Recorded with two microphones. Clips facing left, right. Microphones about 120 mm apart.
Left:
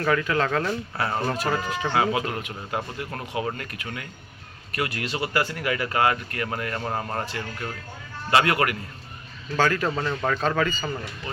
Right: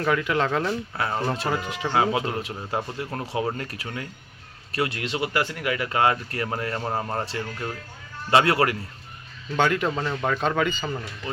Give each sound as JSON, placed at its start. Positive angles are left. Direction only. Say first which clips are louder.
{"t": 0.0, "sound": "speech", "louder": "even", "side_deg": -10}
{"t": 6.7, "sound": "speech", "louder": "right 1 dB", "side_deg": -15}
{"t": 7.3, "sound": "speech", "louder": "right 2 dB", "side_deg": -30}
{"t": 9.6, "sound": "speech", "louder": "even", "side_deg": -15}
{"t": 9.9, "sound": "speech", "louder": "even", "side_deg": -5}